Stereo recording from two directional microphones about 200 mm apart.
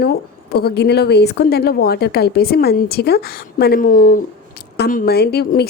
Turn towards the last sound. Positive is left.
turn(degrees=50)  # may be behind; listen again after turning